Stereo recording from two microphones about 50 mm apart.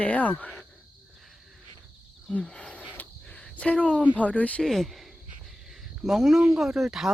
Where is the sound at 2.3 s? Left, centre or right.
Centre.